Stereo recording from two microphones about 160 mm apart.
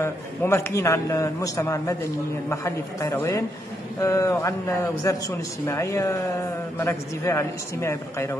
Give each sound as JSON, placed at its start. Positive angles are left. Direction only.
{"t": 0.0, "sound": "a man's voice", "side_deg": 15}